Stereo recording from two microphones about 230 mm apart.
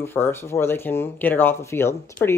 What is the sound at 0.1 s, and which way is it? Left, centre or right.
Speech, centre.